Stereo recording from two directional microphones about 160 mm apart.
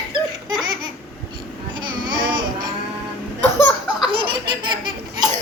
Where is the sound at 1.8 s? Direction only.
30° right (ahead or behind).